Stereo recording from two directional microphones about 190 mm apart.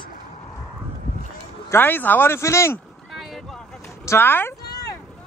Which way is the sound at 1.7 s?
10° left (ahead or behind).